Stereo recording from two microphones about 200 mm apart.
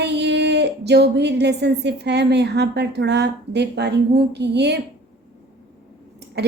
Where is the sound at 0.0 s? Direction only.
60° right (ahead or behind).